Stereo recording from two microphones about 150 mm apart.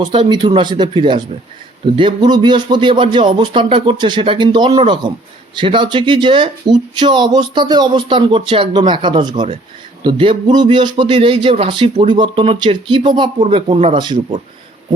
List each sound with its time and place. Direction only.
0.0 s speech: 30° right (ahead or behind)